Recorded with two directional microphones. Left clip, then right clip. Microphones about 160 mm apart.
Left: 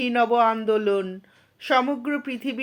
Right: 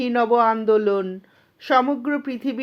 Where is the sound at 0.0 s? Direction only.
30° right (ahead or behind).